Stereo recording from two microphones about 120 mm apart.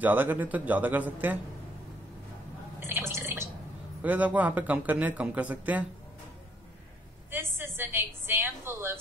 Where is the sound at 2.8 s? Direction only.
20° right (ahead or behind).